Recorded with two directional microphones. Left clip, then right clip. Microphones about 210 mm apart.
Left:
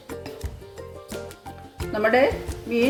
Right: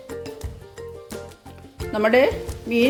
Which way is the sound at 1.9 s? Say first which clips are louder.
Right 2 dB; 35° right (ahead or behind).